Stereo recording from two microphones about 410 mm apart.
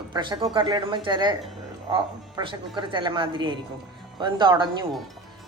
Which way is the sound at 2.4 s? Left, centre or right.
Centre.